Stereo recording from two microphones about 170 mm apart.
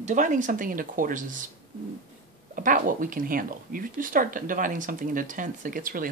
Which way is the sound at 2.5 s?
55° right (ahead or behind).